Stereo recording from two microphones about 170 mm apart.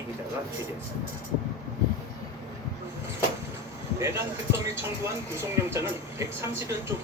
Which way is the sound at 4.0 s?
15° right (ahead or behind).